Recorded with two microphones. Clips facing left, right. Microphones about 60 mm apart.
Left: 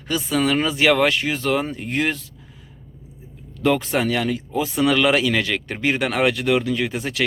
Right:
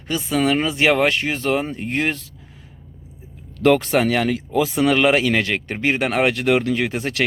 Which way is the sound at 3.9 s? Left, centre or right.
Right.